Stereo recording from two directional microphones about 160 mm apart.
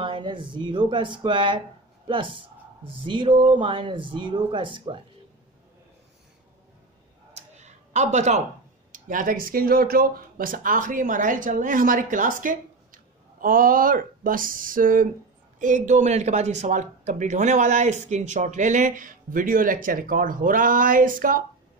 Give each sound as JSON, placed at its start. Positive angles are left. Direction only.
{"t": 0.0, "sound": "speech", "side_deg": -30}
{"t": 7.3, "sound": "a sound", "side_deg": -45}
{"t": 8.9, "sound": "speech", "side_deg": -55}